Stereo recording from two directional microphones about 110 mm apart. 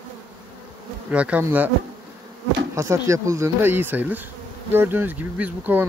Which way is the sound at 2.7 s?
30° right (ahead or behind).